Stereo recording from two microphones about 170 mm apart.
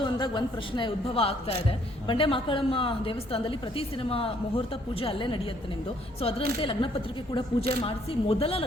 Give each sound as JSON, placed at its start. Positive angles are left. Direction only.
{"t": 0.0, "sound": "a woman's voice", "side_deg": 25}